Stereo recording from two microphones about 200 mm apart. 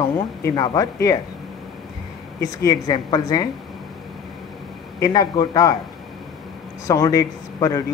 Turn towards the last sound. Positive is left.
turn(degrees=15)  # may be behind; listen again after turning